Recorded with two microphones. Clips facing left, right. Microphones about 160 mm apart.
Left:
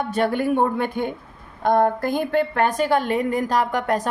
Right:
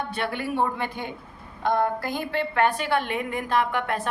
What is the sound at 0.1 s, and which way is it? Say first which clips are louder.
A woman's voice: left 8 dB; 45° left (ahead or behind).